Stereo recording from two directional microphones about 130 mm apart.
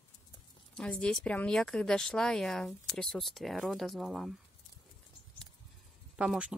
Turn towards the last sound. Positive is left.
turn(degrees=-5)  # may be behind; listen again after turning